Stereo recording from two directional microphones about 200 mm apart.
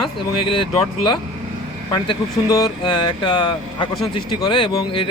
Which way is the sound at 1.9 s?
20° left (ahead or behind).